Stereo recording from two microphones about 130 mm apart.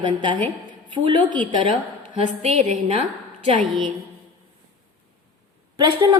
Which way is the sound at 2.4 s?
55° right (ahead or behind).